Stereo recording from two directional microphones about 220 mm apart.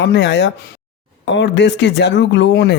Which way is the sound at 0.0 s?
55° left (ahead or behind).